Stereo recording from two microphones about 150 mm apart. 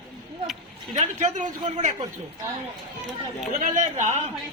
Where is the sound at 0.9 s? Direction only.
50° right (ahead or behind).